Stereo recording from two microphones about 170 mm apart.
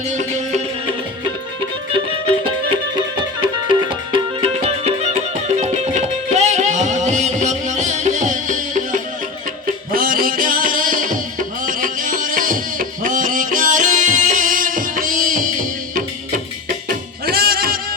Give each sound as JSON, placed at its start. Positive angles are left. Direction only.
{"t": 0.1, "sound": "music", "side_deg": -45}
{"t": 3.4, "sound": "music", "side_deg": -30}
{"t": 16.9, "sound": "music", "side_deg": -65}